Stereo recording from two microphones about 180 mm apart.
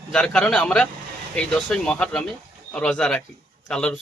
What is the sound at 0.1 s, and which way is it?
Speech, 5° left (ahead or behind).